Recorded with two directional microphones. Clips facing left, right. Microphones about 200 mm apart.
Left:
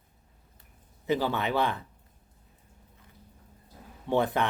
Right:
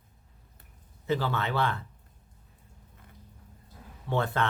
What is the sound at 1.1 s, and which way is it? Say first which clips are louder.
Speech: left 2 dB; 15° left (ahead or behind).